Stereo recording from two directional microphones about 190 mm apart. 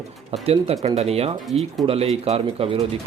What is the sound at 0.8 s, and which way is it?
Speech, 35° right (ahead or behind).